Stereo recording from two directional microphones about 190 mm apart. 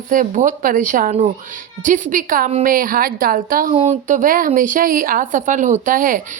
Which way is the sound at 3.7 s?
35° right (ahead or behind).